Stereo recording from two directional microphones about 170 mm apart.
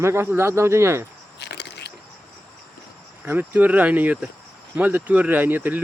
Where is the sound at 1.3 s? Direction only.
85° left.